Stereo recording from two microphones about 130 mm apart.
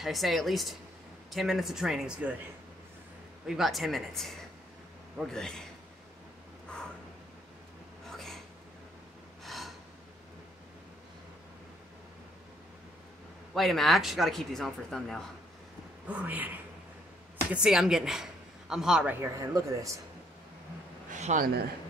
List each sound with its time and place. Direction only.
0.0 s speech: centre (ahead or behind)
3.4 s speech: centre (ahead or behind)
8.1 s a sound: centre (ahead or behind)
9.4 s gasp: centre (ahead or behind)
13.6 s speech: centre (ahead or behind)
16.1 s a woman's voice: 10° right (ahead or behind)
19.1 s speech: 20° right (ahead or behind)
21.1 s a sound: 70° right (ahead or behind)